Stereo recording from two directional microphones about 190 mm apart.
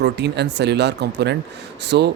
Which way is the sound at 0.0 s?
65° right (ahead or behind).